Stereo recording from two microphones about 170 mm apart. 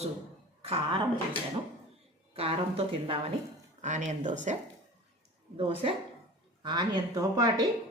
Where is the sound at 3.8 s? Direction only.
45° right (ahead or behind).